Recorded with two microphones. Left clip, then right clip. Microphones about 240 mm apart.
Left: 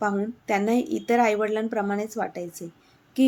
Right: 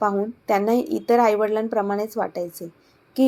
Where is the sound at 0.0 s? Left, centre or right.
Centre.